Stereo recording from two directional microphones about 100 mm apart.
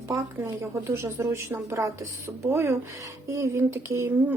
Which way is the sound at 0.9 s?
25° right (ahead or behind).